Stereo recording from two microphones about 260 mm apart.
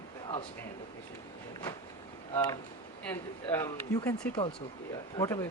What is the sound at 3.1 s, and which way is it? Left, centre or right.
Speech, centre.